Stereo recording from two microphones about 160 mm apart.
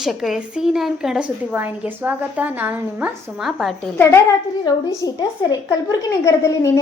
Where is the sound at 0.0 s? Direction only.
5° right (ahead or behind).